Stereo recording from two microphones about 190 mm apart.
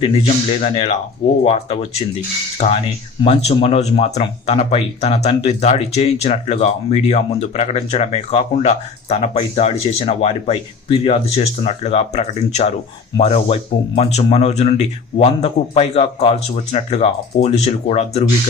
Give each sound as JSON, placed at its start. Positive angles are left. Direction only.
{"t": 0.6, "sound": "speech", "side_deg": 30}